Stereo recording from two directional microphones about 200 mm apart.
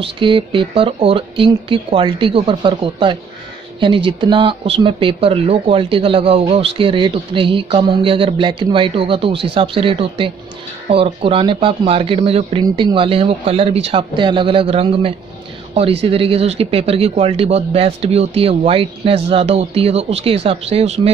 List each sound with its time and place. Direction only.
0.0 s speech: 25° right (ahead or behind)